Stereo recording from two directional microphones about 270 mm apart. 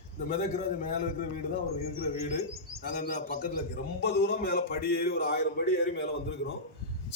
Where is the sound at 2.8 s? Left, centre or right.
Left.